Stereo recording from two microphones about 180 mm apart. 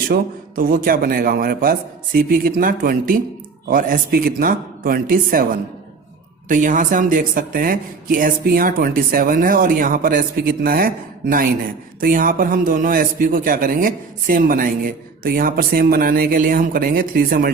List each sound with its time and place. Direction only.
0.1 s a man's voice: 55° right (ahead or behind)